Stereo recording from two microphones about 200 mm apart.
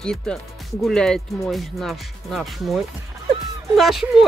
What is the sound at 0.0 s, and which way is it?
Speech, 5° left (ahead or behind).